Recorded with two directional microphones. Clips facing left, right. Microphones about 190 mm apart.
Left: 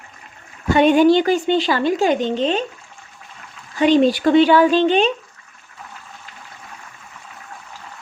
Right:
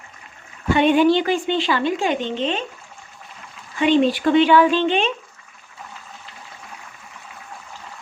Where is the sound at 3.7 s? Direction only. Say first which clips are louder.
Left 3 dB; 40° left (ahead or behind).